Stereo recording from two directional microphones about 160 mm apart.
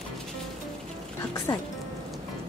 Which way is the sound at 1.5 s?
20° left (ahead or behind).